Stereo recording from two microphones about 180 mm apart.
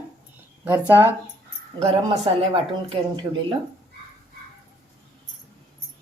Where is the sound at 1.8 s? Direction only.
30° right (ahead or behind).